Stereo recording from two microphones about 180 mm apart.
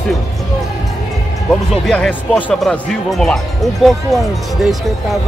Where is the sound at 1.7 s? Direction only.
5° left (ahead or behind).